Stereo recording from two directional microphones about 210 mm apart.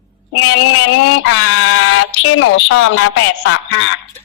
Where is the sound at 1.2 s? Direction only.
70° left (ahead or behind).